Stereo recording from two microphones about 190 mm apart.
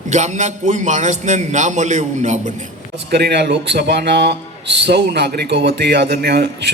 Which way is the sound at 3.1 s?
60° right (ahead or behind).